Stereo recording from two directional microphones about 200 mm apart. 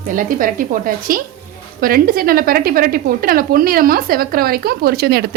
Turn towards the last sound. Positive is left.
turn(degrees=-50)  # may be behind; listen again after turning